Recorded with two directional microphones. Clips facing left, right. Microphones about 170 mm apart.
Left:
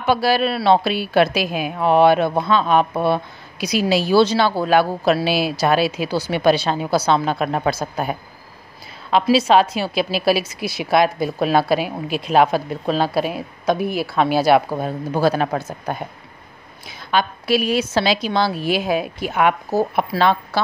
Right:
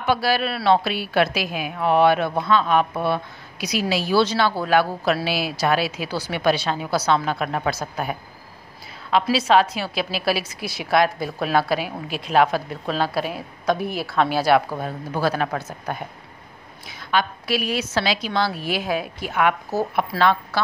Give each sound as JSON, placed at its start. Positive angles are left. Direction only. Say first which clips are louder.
{"t": 0.0, "sound": "a woman's voice", "louder": "left 4 dB", "side_deg": 25}
{"t": 9.1, "sound": "a woman's voice", "louder": "left 3 dB", "side_deg": 20}
{"t": 17.1, "sound": "a woman's voice", "louder": "left 4 dB", "side_deg": 30}